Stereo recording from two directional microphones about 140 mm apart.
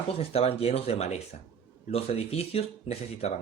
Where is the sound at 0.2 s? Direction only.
45° left (ahead or behind).